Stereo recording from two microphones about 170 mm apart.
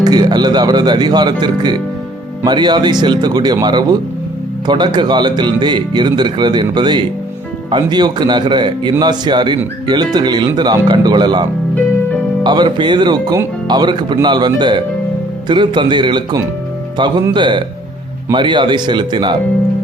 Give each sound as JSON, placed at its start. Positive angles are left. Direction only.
{"t": 0.0, "sound": "speech", "side_deg": -25}